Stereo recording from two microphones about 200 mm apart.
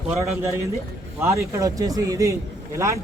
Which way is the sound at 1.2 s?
15° right (ahead or behind).